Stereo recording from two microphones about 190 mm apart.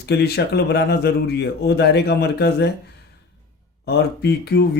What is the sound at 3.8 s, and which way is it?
Speech, 60° left (ahead or behind).